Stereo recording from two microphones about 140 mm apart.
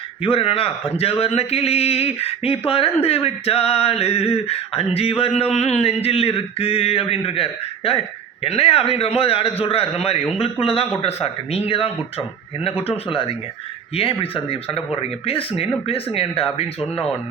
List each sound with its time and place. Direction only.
0.2 s speech: 40° left (ahead or behind)
12.9 s speech: 40° left (ahead or behind)